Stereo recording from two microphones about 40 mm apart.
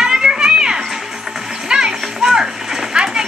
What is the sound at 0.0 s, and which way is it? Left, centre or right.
Music, centre.